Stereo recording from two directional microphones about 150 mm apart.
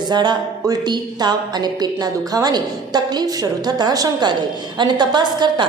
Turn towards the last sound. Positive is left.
turn(degrees=-30)  # may be behind; listen again after turning